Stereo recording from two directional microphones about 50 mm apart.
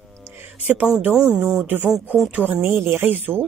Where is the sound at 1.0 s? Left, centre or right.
Right.